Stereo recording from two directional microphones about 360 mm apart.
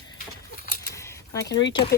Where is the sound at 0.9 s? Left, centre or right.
Centre.